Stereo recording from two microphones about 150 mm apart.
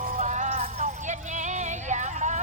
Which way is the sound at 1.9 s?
55° right (ahead or behind).